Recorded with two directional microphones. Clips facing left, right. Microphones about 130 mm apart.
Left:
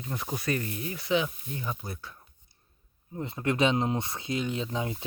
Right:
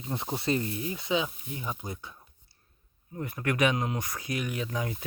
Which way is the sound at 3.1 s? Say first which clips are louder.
Left 1 dB; 25° left (ahead or behind).